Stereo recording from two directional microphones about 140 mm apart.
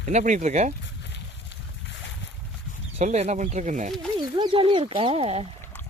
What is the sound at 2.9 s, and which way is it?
Speech, 55° right (ahead or behind).